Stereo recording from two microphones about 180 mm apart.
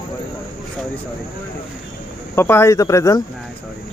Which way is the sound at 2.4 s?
15° left (ahead or behind).